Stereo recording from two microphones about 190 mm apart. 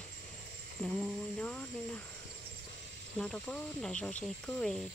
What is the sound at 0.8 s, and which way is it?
Speech, 10° left (ahead or behind).